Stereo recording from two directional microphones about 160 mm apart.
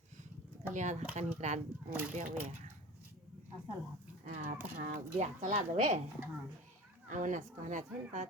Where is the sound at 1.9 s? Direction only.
10° right (ahead or behind).